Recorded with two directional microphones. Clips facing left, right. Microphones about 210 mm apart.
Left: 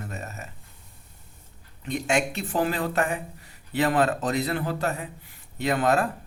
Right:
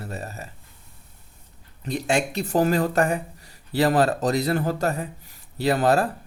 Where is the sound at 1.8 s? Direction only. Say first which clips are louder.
Right 1 dB; 35° right (ahead or behind).